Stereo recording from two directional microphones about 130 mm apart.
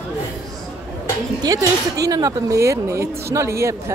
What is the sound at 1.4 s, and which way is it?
Speech, 30° right (ahead or behind).